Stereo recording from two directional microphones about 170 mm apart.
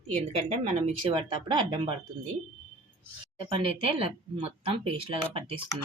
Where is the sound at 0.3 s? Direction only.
40° right (ahead or behind).